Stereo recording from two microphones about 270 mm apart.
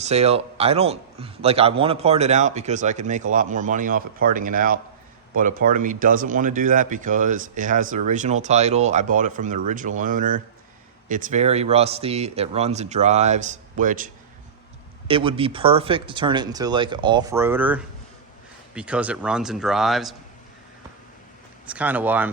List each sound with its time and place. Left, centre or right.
0.0 s speech: right
15.0 s speech: centre
21.7 s speech: centre